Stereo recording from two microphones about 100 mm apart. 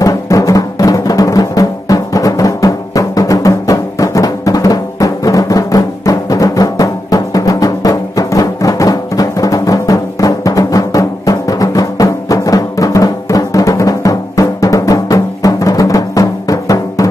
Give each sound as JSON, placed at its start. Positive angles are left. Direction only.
{"t": 0.0, "sound": "music", "side_deg": 35}